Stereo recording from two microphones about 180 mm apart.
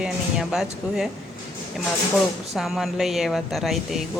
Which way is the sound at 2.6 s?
Centre (ahead or behind).